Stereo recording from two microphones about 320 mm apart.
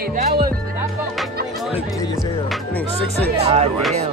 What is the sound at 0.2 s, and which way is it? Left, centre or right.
Speech, right.